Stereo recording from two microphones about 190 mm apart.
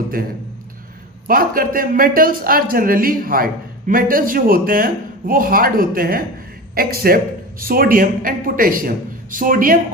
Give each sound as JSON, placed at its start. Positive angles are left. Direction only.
{"t": 1.3, "sound": "a man's voice", "side_deg": -50}